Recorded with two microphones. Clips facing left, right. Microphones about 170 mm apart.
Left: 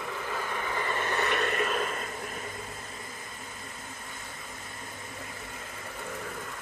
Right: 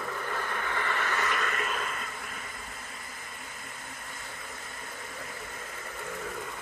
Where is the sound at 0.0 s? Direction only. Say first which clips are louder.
Even; 5° left (ahead or behind); by 2.5 s 30° left (ahead or behind).